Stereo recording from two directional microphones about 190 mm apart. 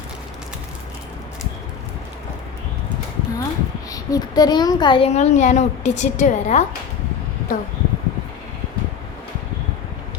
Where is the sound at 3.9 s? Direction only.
20° left (ahead or behind); by 6.6 s 40° left (ahead or behind).